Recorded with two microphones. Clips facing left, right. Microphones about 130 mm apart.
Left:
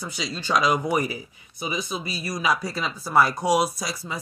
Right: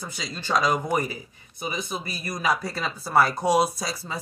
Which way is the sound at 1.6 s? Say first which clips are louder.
Left 2 dB; 45° right (ahead or behind).